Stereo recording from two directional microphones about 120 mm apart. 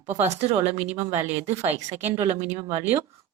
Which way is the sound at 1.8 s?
25° right (ahead or behind).